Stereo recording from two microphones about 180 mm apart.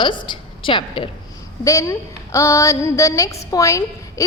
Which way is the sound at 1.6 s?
15° left (ahead or behind).